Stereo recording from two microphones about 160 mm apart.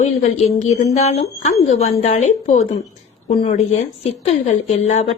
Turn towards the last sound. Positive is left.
turn(degrees=45)  # may be behind; listen again after turning